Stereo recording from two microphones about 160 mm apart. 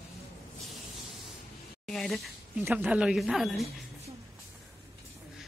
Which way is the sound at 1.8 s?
Centre (ahead or behind).